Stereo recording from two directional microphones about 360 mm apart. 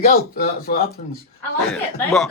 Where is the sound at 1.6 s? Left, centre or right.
Centre.